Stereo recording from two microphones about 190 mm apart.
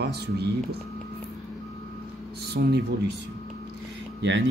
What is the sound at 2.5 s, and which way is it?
Speech, 60° right (ahead or behind).